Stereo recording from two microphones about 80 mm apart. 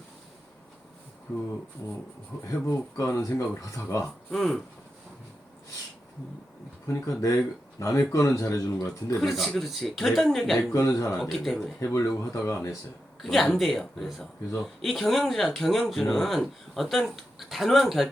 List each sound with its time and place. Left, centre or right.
2.5 s speech: left
4.0 s speech: centre
6.8 s speech: left
9.2 s speech: centre
10.7 s speech: left
11.2 s speech: centre
11.8 s speech: left
13.2 s speech: centre